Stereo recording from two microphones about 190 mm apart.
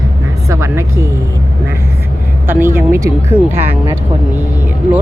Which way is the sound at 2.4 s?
10° right (ahead or behind).